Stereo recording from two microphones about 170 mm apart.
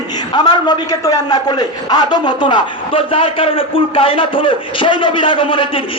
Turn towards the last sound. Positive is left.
turn(degrees=30)  # may be behind; listen again after turning